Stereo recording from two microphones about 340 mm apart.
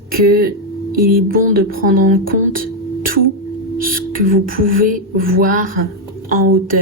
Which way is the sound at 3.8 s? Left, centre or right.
Right.